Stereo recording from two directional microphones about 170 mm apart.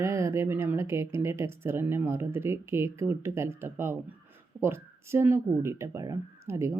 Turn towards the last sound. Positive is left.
turn(degrees=-15)  # may be behind; listen again after turning